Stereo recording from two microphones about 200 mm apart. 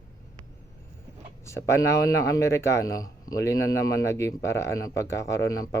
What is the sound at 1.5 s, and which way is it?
Speech, 15° left (ahead or behind).